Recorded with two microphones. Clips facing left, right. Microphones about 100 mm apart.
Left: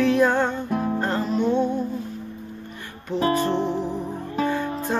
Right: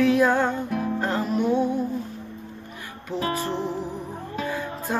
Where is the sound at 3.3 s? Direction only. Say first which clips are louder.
Left 6 dB; 5° right (ahead or behind).